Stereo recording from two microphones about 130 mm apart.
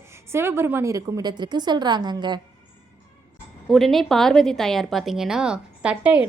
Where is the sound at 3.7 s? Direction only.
Centre (ahead or behind).